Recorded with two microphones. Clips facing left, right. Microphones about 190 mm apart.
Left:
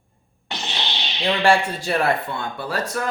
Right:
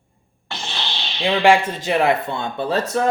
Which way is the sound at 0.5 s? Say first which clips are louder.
Even; 20° left (ahead or behind).